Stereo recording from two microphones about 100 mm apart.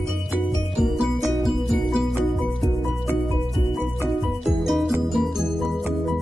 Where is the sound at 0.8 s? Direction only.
Centre (ahead or behind).